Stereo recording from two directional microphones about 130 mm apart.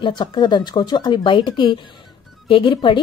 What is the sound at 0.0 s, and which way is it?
A woman's voice, 35° left (ahead or behind).